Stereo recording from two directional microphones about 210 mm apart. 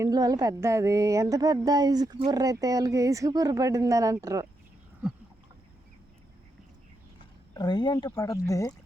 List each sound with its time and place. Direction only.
0.0 s speech: 15° right (ahead or behind)
7.5 s speech: 20° left (ahead or behind)